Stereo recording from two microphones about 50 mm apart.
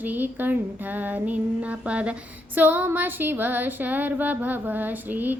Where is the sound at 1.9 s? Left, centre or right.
Right.